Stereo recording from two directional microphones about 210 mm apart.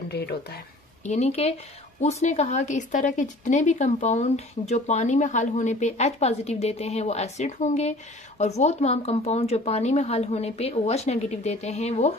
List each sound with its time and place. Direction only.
1.0 s a woman's voice: 35° left (ahead or behind)